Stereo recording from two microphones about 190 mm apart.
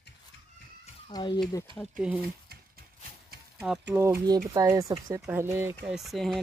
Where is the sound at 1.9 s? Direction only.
5° right (ahead or behind).